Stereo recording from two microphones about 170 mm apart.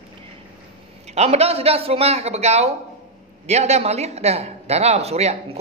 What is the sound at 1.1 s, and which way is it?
A woman's voice, 40° right (ahead or behind).